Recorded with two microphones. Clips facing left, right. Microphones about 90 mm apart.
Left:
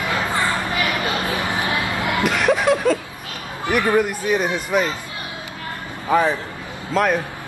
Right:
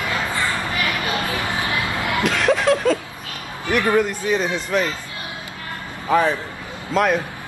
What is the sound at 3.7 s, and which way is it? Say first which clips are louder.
Speech: even; 10° left (ahead or behind).